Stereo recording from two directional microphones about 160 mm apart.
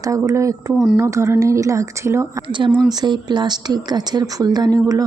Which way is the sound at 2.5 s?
30° right (ahead or behind).